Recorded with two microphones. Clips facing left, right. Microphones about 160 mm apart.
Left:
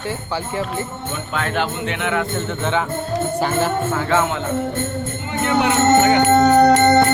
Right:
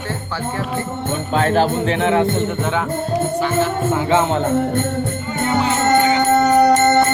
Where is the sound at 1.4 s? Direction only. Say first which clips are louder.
Right 6 dB; 35° right (ahead or behind).